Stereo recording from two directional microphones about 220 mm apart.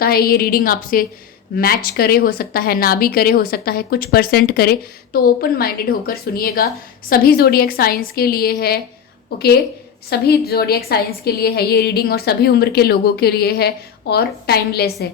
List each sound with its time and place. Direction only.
0.0 s a woman's voice: 45° left (ahead or behind)
10.1 s a woman's voice: 45° left (ahead or behind)